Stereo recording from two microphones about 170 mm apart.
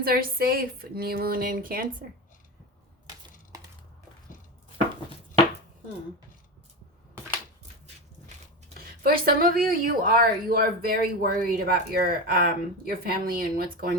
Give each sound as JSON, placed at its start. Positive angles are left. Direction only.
{"t": 0.0, "sound": "speech", "side_deg": -60}
{"t": 8.8, "sound": "speech", "side_deg": -60}